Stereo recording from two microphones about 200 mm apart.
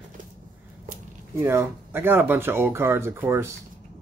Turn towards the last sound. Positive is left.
turn(degrees=-15)  # may be behind; listen again after turning